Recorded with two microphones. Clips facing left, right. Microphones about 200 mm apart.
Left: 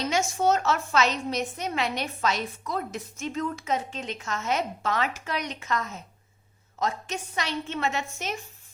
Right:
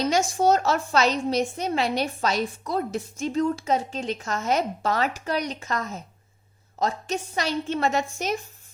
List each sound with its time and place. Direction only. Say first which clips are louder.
0.0 s a woman's voice: right 3 dB; 35° right (ahead or behind)